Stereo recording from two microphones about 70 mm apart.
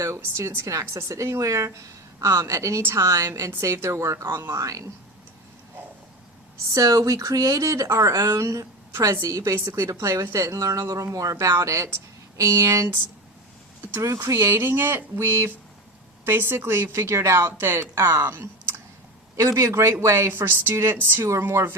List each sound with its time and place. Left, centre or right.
0.0 s a woman's voice: right
3.0 s a woman's voice: right
4.6 s a woman's voice: right
6.7 s a woman's voice: right
13.9 s a woman's voice: right
19.4 s a woman's voice: right